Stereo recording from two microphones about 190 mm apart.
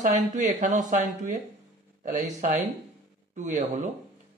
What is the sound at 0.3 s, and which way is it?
Speech, 40° right (ahead or behind).